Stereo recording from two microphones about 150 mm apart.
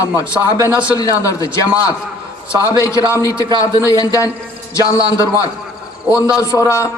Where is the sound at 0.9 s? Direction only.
20° left (ahead or behind).